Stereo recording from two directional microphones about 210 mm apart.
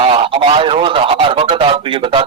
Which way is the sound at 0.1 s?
25° right (ahead or behind).